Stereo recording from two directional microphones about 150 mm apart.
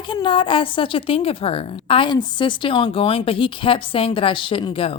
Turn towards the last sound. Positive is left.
turn(degrees=40)  # may be behind; listen again after turning